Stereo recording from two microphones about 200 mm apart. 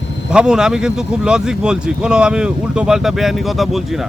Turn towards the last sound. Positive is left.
turn(degrees=0)  # may be behind; listen again after turning